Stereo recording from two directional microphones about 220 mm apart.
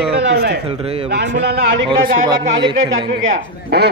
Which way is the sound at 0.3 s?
50° right (ahead or behind).